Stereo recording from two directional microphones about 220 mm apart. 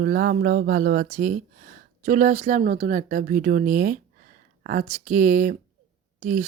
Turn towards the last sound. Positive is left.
turn(degrees=-35)  # may be behind; listen again after turning